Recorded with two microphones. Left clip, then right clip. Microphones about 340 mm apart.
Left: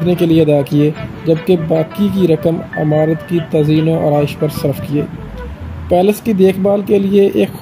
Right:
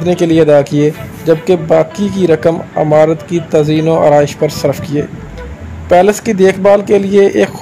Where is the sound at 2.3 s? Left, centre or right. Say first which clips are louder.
Right 6 dB; right.